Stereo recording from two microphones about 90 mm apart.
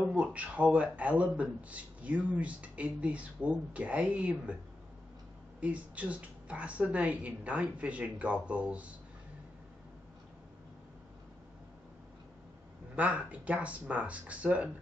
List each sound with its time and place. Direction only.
0.2 s speech: 15° right (ahead or behind)
5.6 s speech: 15° right (ahead or behind)
12.9 s speech: 15° right (ahead or behind)